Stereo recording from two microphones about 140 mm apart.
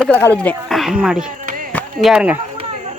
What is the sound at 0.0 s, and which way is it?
Speech, 15° left (ahead or behind).